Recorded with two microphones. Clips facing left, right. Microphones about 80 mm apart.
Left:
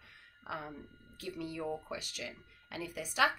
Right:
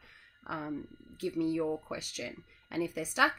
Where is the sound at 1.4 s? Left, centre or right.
Centre.